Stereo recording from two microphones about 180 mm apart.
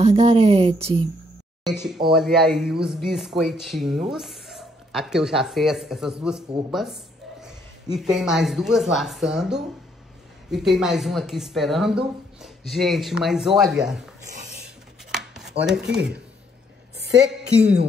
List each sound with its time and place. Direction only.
0.0 s speech: 35° right (ahead or behind)
1.6 s speech: centre (ahead or behind)
14.6 s chopping: centre (ahead or behind)
15.6 s speech: 5° right (ahead or behind)